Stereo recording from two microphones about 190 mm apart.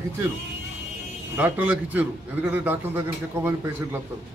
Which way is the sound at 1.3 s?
10° right (ahead or behind).